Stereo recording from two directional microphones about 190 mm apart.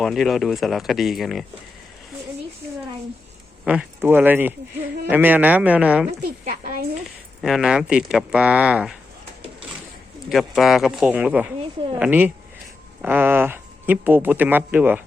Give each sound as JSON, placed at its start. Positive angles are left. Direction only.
{"t": 0.0, "sound": "speech", "side_deg": 0}
{"t": 3.6, "sound": "speech", "side_deg": -5}
{"t": 6.2, "sound": "a woman's voice", "side_deg": -45}
{"t": 7.0, "sound": "speech", "side_deg": 0}
{"t": 10.2, "sound": "speech", "side_deg": 0}